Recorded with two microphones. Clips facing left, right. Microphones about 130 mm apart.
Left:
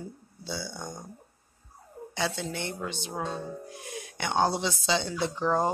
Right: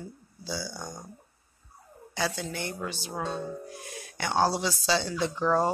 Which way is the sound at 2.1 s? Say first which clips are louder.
Even; 25° left (ahead or behind).